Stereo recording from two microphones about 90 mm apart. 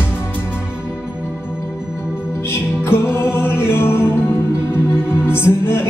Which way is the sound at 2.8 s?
30° left (ahead or behind).